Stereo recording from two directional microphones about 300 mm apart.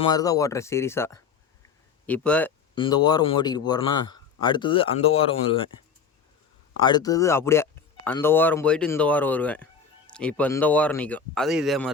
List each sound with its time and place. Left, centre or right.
0.0 s speech: centre
2.7 s speech: centre
6.7 s speech: centre